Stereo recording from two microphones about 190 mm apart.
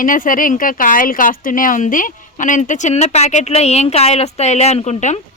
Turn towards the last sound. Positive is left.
turn(degrees=35)  # may be behind; listen again after turning